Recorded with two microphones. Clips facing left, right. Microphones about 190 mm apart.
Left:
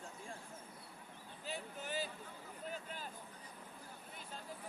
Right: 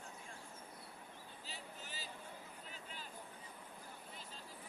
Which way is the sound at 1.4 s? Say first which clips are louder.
Left 10 dB; 55° left (ahead or behind).